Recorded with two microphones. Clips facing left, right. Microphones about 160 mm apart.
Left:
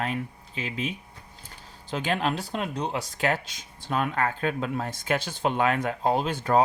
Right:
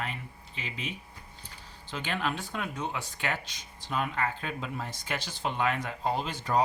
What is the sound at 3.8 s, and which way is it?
Speech, 50° left (ahead or behind).